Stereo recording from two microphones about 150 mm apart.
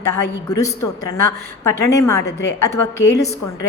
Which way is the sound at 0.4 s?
20° left (ahead or behind).